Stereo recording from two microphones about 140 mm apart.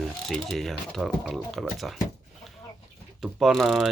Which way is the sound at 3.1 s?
Centre (ahead or behind).